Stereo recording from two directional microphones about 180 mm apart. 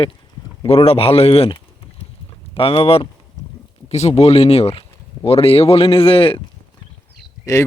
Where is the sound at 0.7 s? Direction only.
35° left (ahead or behind).